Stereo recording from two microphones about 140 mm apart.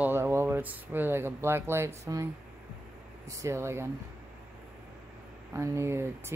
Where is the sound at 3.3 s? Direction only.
20° right (ahead or behind).